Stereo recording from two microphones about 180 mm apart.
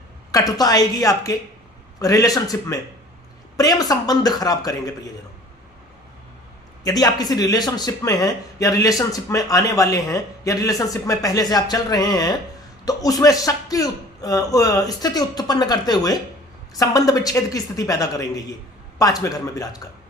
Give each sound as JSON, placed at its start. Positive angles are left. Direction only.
{"t": 0.3, "sound": "speech", "side_deg": 20}
{"t": 6.8, "sound": "speech", "side_deg": 20}